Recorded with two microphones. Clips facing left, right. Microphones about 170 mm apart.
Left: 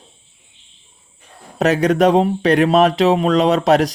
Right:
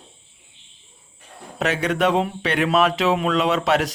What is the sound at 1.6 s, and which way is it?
Speech, 40° left (ahead or behind).